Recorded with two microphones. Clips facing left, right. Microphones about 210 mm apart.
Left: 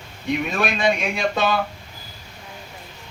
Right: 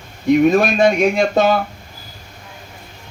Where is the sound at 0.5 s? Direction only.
45° right (ahead or behind).